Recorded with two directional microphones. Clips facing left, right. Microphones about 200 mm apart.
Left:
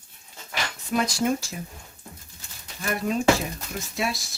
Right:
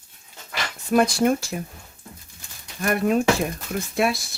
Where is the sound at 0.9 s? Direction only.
55° right (ahead or behind).